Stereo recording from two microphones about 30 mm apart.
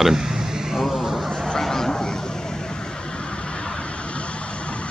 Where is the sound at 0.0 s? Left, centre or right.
Centre.